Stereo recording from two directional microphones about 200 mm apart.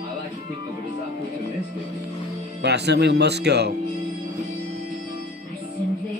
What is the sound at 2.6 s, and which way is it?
Speech, 55° right (ahead or behind).